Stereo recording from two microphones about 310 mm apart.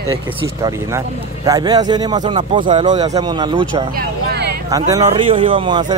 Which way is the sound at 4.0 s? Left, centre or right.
Right.